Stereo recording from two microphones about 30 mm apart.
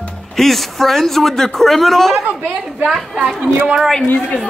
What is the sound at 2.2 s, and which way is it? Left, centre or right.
Speech, right.